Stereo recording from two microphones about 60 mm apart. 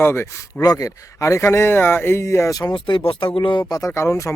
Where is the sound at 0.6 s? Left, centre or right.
Left.